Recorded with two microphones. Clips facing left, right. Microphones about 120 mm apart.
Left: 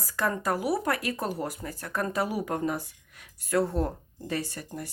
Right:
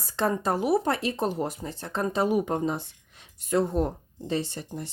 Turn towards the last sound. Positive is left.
turn(degrees=-25)  # may be behind; listen again after turning